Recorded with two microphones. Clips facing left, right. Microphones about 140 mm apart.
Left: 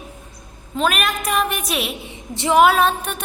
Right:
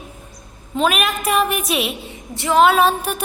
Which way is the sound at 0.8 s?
Centre (ahead or behind).